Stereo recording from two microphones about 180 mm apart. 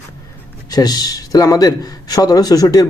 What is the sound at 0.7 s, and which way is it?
A man's voice, 20° left (ahead or behind).